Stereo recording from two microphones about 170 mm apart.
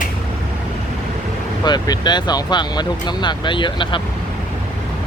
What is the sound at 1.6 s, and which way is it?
Speech, 25° left (ahead or behind).